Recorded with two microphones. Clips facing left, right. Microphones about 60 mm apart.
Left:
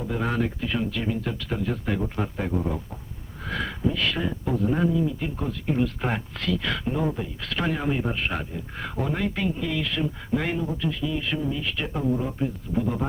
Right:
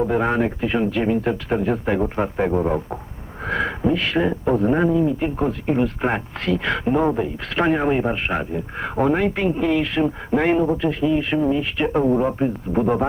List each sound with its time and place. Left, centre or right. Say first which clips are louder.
0.1 s speech: right 7 dB; right
2.5 s speech: right 8 dB; right
3.4 s speech: right 6 dB; right
9.0 s speech: right 8 dB; right